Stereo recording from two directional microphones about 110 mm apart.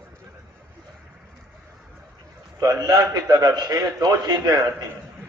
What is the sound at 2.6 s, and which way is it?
A man's voice, 35° right (ahead or behind).